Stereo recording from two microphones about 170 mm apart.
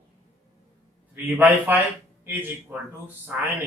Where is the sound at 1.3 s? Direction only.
10° right (ahead or behind).